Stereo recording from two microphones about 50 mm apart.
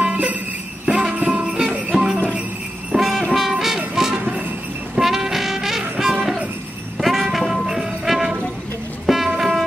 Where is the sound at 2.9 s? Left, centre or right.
Centre.